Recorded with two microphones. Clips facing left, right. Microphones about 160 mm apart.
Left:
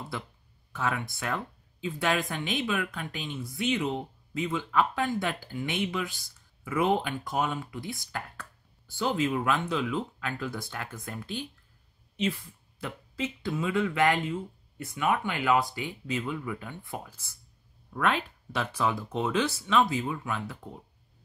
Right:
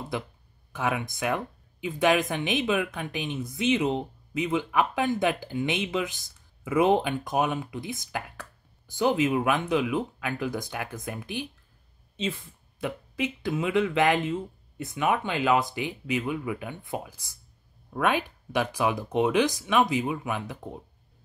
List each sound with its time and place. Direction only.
0.7 s speech: 15° right (ahead or behind)